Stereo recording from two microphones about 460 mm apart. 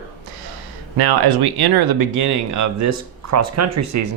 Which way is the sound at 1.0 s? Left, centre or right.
Right.